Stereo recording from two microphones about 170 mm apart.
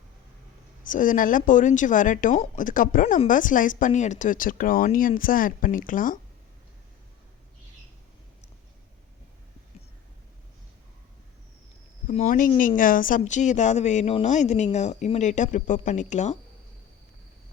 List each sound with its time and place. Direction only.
0.9 s speech: 50° left (ahead or behind)
12.0 s speech: 45° left (ahead or behind)